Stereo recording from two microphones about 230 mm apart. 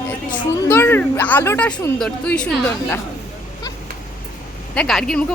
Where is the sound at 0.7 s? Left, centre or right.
Centre.